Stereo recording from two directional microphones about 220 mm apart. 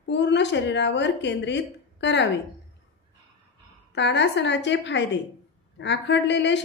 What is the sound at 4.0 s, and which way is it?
A woman's voice, 55° left (ahead or behind).